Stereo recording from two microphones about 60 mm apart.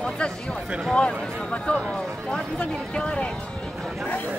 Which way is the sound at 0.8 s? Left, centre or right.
Centre.